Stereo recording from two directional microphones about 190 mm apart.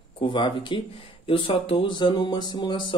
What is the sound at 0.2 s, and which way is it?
Speech, 25° left (ahead or behind).